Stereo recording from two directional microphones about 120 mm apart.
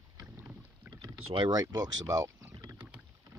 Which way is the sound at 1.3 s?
40° right (ahead or behind).